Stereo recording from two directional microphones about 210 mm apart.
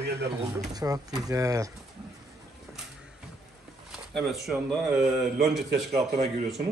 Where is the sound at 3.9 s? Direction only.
Centre (ahead or behind).